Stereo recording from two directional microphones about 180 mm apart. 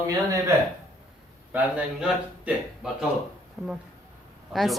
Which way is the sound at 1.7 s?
5° right (ahead or behind).